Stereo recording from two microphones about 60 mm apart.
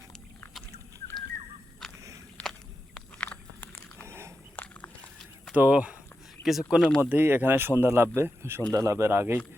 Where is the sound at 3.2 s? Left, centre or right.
Left.